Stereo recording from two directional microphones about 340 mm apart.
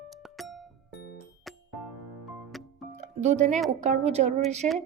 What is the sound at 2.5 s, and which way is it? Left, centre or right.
Music, centre.